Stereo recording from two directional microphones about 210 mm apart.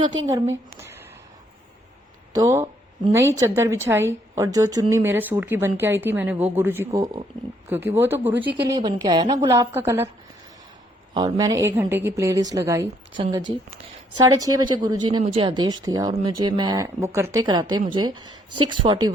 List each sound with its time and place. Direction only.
0.0 s a woman's voice: 15° right (ahead or behind)
2.3 s a woman's voice: 15° right (ahead or behind)
11.1 s a woman's voice: 20° right (ahead or behind)